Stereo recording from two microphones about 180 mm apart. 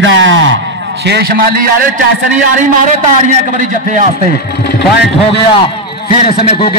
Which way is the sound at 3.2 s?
45° right (ahead or behind).